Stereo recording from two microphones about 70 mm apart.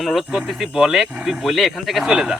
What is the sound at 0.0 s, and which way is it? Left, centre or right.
Speech, centre.